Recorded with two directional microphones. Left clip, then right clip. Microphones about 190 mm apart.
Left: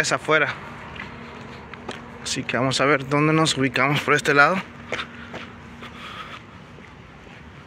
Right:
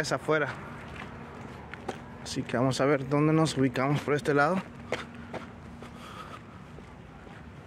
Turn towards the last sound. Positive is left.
turn(degrees=-20)  # may be behind; listen again after turning